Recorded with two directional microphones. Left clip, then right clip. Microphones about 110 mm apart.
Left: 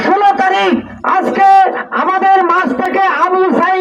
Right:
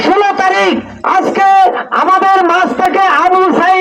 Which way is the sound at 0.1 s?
15° right (ahead or behind).